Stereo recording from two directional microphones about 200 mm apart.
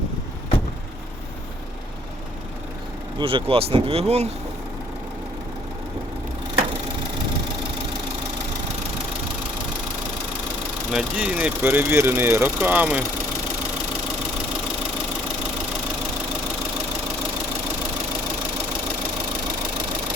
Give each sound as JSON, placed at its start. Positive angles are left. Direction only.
{"t": 3.2, "sound": "speech", "side_deg": -25}
{"t": 10.9, "sound": "speech", "side_deg": -5}